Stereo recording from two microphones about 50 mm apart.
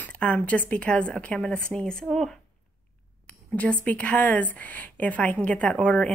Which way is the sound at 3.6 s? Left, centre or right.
Left.